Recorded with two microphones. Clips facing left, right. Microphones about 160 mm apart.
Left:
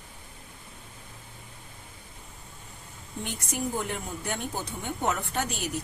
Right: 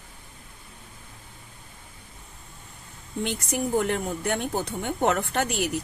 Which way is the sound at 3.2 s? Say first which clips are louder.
Right 4 dB; 70° right (ahead or behind).